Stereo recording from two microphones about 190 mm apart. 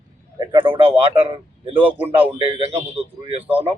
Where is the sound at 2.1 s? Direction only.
30° right (ahead or behind).